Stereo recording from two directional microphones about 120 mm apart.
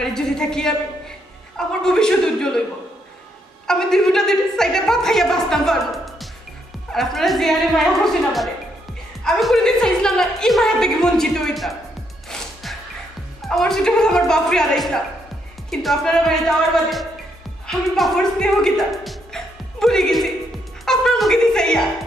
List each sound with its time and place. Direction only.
0.0 s a woman's voice: 5° left (ahead or behind)
3.6 s a woman's voice: 5° left (ahead or behind)
13.4 s a woman's voice: 5° left (ahead or behind)